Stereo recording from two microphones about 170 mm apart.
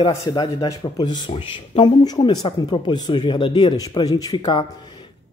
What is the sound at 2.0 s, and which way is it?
A woman's voice, 25° left (ahead or behind).